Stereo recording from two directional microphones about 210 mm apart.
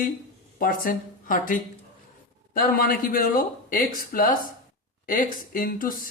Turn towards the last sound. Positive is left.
turn(degrees=40)  # may be behind; listen again after turning